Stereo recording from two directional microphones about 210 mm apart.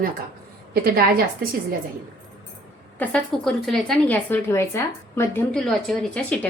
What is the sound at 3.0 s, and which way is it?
Speech, centre (ahead or behind).